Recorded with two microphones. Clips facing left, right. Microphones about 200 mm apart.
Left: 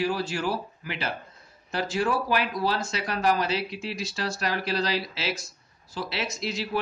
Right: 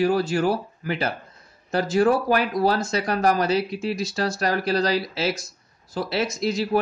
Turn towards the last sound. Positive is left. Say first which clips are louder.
# right 7 dB
turn(degrees=-45)  # may be behind; listen again after turning